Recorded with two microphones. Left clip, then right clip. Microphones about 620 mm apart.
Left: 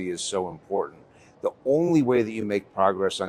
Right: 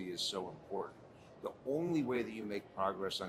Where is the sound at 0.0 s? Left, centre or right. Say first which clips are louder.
Left 12 dB; left.